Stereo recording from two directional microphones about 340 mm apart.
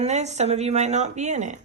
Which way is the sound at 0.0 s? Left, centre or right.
Centre.